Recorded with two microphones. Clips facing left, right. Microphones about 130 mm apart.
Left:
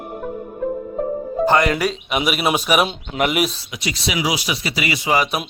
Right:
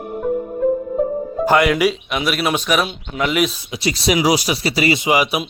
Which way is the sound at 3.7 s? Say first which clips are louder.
Right 6 dB; 35° right (ahead or behind).